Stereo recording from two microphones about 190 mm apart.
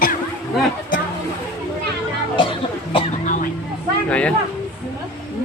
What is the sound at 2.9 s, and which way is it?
Cough, 40° left (ahead or behind).